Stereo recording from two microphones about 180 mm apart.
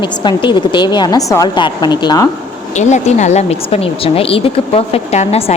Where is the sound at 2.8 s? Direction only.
40° left (ahead or behind).